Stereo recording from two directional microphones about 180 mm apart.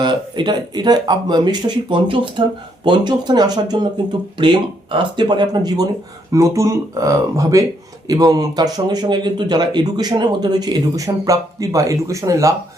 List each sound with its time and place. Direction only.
0.0 s speech: 25° right (ahead or behind)